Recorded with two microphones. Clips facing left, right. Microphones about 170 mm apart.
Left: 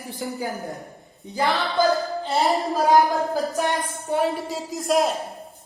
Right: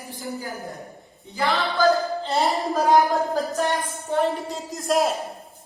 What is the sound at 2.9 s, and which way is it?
Speech, centre (ahead or behind).